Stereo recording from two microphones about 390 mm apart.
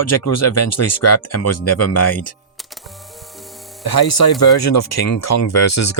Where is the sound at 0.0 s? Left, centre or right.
Left.